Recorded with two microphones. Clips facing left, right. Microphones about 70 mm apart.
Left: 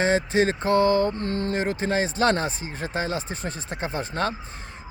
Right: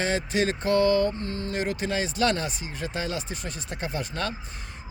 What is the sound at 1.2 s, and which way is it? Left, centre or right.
Speech, left.